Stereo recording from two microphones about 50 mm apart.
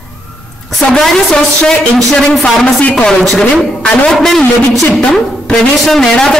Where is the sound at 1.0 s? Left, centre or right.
Centre.